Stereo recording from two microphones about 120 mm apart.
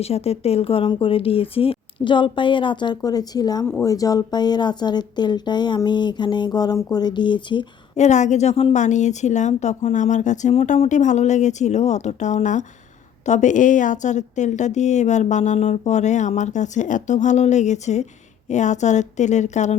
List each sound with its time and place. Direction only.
0.0 s speech: 60° left (ahead or behind); by 7.7 s 40° left (ahead or behind)
7.9 s speech: 75° left (ahead or behind)
8.7 s a woman's voice: 85° left
10.5 s a woman's voice: 65° left (ahead or behind)